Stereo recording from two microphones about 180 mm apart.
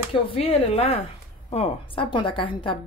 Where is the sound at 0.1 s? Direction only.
30° left (ahead or behind).